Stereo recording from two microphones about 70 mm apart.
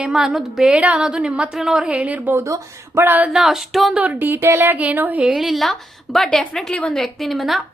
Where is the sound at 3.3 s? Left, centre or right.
Centre.